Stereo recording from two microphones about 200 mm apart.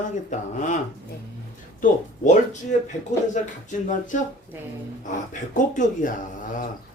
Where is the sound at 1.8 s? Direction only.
40° left (ahead or behind).